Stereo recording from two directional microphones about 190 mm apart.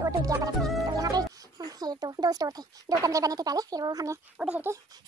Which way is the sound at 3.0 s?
20° right (ahead or behind).